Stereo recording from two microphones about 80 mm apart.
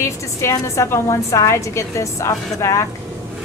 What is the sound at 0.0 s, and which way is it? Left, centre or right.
A woman's voice, left.